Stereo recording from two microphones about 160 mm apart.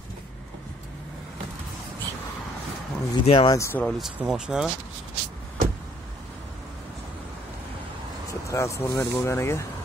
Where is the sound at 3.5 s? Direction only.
15° left (ahead or behind).